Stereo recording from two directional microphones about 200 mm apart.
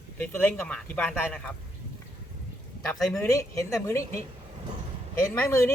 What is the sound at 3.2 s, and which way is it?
Speech, 15° left (ahead or behind).